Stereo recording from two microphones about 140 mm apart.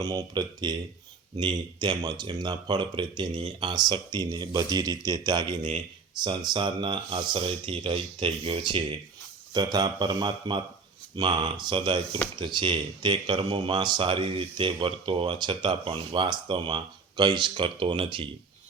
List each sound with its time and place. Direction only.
0.0 s speech: 25° right (ahead or behind)